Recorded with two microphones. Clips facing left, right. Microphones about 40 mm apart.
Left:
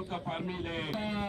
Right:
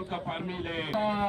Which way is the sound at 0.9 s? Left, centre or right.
Centre.